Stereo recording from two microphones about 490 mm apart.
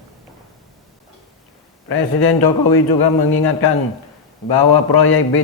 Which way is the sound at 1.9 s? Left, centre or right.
Left.